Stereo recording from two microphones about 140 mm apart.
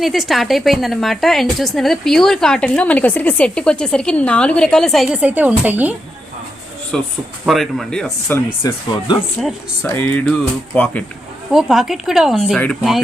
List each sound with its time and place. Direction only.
0.0 s a woman's voice: centre (ahead or behind)
5.2 s a woman's voice: 10° right (ahead or behind)
6.9 s a woman's voice: 5° left (ahead or behind)
8.4 s speech: 30° left (ahead or behind)
9.4 s a woman's voice: 5° left (ahead or behind)
9.8 s speech: 15° left (ahead or behind)
11.5 s a woman's voice: centre (ahead or behind)